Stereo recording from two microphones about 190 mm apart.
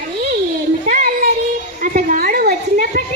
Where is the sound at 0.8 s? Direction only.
50° right (ahead or behind).